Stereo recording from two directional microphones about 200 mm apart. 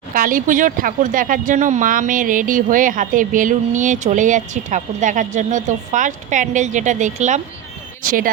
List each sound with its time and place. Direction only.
0.1 s speech: 45° right (ahead or behind)